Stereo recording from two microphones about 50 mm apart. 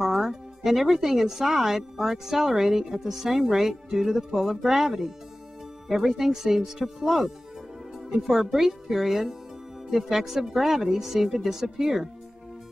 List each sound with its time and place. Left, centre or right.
0.0 s speech: centre